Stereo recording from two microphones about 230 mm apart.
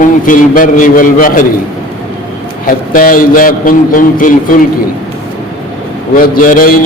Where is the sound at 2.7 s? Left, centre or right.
Left.